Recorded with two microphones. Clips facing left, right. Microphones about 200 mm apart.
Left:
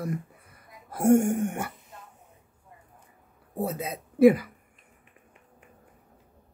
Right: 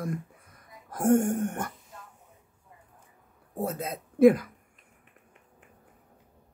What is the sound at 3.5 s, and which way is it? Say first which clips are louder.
Speech: left 1 dB; 5° left (ahead or behind).